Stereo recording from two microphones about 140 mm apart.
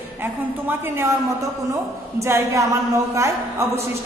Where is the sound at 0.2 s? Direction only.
15° right (ahead or behind).